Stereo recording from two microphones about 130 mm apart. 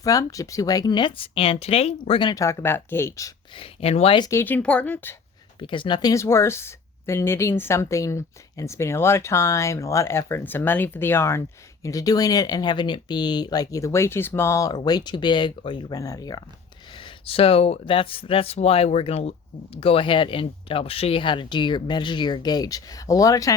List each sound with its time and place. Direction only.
0.0 s speech: 25° left (ahead or behind); by 2.3 s 45° left (ahead or behind)
2.3 s speech: 25° left (ahead or behind)
3.5 s speech: 45° left (ahead or behind)
4.2 s speech: 25° left (ahead or behind)
4.4 s speech: 10° left (ahead or behind)
5.5 s speech: 40° left (ahead or behind)
17.0 s speech: 45° left (ahead or behind); by 23.6 s 25° left (ahead or behind)